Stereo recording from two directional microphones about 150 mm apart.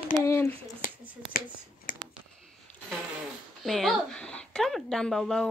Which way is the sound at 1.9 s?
70° left (ahead or behind).